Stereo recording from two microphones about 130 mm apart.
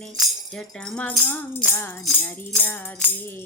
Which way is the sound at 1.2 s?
15° left (ahead or behind).